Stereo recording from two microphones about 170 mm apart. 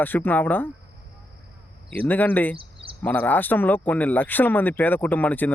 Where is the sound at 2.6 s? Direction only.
30° right (ahead or behind).